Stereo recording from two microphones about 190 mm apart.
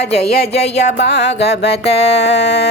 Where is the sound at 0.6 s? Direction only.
35° left (ahead or behind).